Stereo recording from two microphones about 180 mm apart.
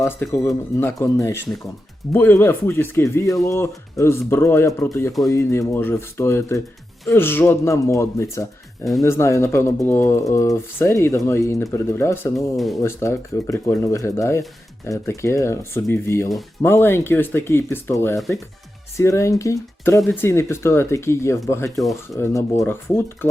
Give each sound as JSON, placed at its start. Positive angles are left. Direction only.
{"t": 0.0, "sound": "speech", "side_deg": 15}
{"t": 8.8, "sound": "speech", "side_deg": 0}
{"t": 9.0, "sound": "speech", "side_deg": 15}
{"t": 12.5, "sound": "speech", "side_deg": 0}
{"t": 12.8, "sound": "speech", "side_deg": 15}
{"t": 21.8, "sound": "speech", "side_deg": 0}
{"t": 22.2, "sound": "speech", "side_deg": 15}